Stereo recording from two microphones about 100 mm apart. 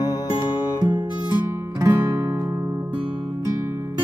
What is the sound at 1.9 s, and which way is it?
Music, 20° right (ahead or behind).